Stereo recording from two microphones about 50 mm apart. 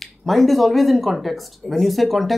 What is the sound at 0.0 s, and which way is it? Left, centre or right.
Speech, centre.